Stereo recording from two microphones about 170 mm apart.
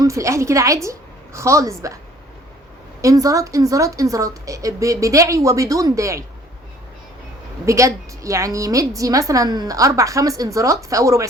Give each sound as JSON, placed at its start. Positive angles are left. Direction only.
{"t": 0.0, "sound": "a woman's voice", "side_deg": -20}
{"t": 3.0, "sound": "a woman's voice", "side_deg": -20}
{"t": 7.6, "sound": "a woman's voice", "side_deg": -20}